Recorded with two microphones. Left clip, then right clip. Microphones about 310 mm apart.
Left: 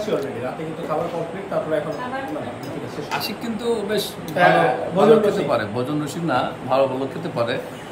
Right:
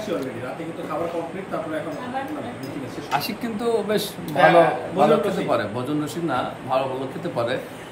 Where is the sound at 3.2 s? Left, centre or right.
Right.